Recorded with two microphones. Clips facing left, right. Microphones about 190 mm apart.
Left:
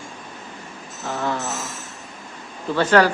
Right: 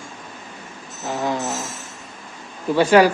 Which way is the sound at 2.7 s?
10° right (ahead or behind).